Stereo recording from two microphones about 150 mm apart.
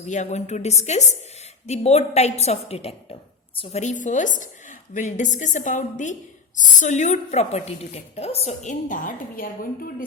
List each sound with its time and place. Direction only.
0.1 s a woman's voice: 50° left (ahead or behind)
8.9 s a woman's voice: 65° left (ahead or behind)